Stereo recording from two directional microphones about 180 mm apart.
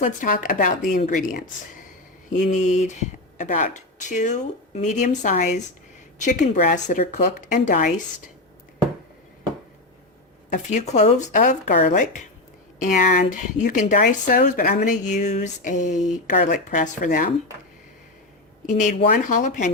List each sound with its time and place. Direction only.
0.0 s speech: 50° left (ahead or behind)
10.5 s speech: 40° left (ahead or behind)
18.6 s speech: 45° left (ahead or behind)